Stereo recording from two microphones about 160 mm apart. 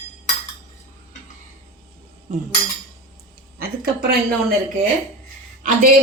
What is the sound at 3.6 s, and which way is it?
Speech, 75° right (ahead or behind).